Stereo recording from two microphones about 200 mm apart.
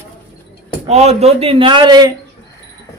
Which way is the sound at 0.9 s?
30° right (ahead or behind).